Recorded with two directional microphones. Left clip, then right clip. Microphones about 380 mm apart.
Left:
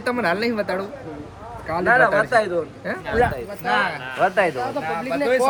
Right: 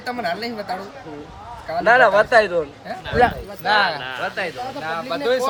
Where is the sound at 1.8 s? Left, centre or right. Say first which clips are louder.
Right 3 dB; right.